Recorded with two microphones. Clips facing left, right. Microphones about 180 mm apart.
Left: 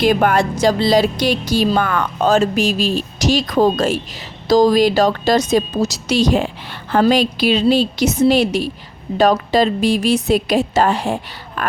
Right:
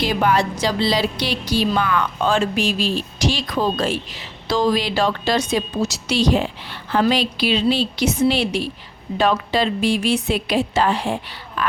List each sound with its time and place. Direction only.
0.0 s a woman's voice: 50° left (ahead or behind)